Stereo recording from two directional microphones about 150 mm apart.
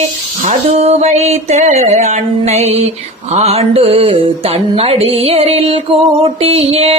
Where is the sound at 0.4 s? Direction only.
45° right (ahead or behind).